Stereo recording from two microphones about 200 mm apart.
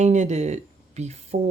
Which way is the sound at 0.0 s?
35° right (ahead or behind).